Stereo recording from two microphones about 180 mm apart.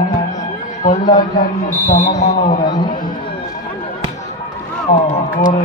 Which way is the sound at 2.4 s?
45° left (ahead or behind).